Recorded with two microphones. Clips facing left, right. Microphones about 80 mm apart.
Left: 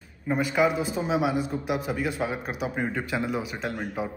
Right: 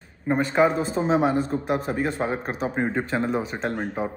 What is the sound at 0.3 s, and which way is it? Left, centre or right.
Speech, right.